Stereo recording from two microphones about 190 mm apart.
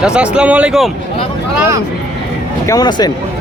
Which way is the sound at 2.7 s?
20° left (ahead or behind).